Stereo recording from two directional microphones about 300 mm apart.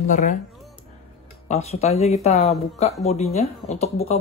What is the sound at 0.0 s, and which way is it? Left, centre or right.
Speech, left.